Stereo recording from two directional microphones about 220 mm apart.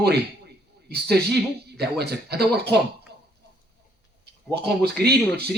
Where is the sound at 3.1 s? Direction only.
50° right (ahead or behind).